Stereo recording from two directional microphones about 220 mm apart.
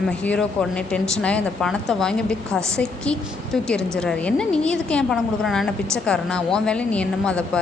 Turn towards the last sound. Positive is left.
turn(degrees=5)  # may be behind; listen again after turning